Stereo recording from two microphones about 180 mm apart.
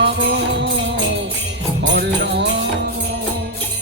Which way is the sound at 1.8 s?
80° right.